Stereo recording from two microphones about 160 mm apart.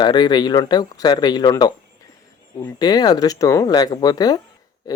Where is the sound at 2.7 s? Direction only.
25° left (ahead or behind).